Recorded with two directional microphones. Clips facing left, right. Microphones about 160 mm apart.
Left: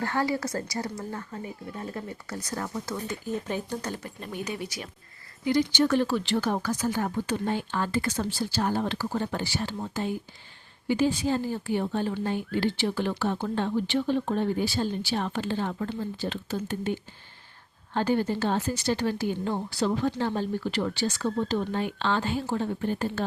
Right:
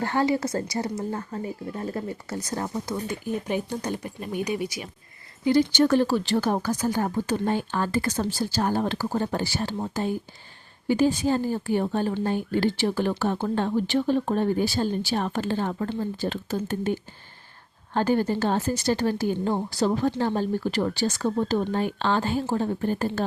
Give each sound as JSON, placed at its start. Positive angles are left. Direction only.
{"t": 0.0, "sound": "speech", "side_deg": -25}
{"t": 5.5, "sound": "speech", "side_deg": -40}